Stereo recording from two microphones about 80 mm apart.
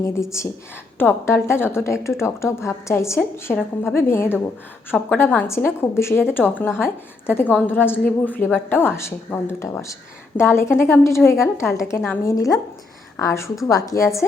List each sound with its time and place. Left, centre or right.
0.0 s a woman's voice: left
0.9 s a woman's voice: left